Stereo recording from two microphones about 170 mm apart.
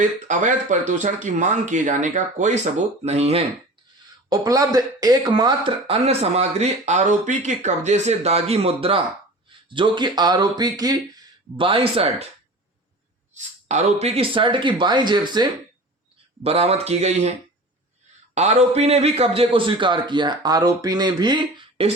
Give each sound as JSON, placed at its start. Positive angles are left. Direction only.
{"t": 0.0, "sound": "speech", "side_deg": -45}
{"t": 4.3, "sound": "a man's voice", "side_deg": -20}
{"t": 13.3, "sound": "a man's voice", "side_deg": -40}
{"t": 16.4, "sound": "speech", "side_deg": -35}
{"t": 18.3, "sound": "a man's voice", "side_deg": -40}